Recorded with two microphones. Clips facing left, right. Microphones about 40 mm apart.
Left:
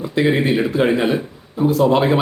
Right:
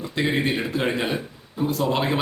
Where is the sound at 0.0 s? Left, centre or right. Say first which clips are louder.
Left 6 dB; centre.